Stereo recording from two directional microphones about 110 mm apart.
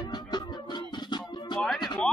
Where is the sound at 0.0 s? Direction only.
40° left (ahead or behind).